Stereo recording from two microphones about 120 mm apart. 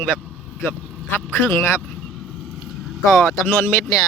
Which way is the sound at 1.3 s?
20° left (ahead or behind).